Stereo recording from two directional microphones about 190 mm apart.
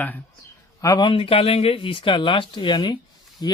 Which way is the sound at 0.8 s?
20° left (ahead or behind).